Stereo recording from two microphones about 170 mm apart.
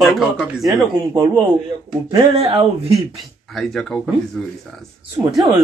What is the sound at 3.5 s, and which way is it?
Speech, centre (ahead or behind).